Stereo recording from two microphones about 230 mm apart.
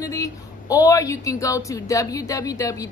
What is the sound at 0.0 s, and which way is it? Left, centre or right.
A woman's voice, centre.